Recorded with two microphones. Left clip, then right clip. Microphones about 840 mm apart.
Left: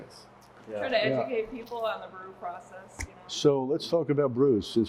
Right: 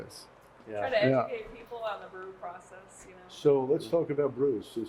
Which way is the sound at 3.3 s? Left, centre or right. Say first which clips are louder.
Even; left.